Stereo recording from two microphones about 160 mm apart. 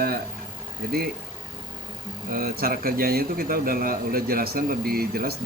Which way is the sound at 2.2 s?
65° right (ahead or behind).